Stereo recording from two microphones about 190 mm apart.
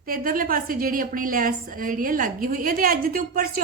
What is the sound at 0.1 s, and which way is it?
A woman's voice, 50° right (ahead or behind).